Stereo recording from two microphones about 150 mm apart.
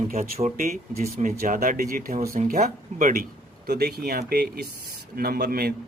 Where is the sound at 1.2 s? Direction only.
65° right (ahead or behind).